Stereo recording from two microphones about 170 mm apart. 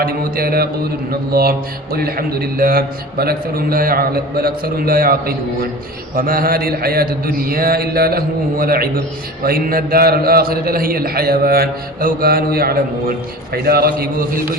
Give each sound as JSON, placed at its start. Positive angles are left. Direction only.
{"t": 0.0, "sound": "a man's voice", "side_deg": -60}